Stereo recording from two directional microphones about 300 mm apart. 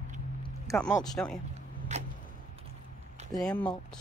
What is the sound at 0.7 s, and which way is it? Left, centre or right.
Speech, centre.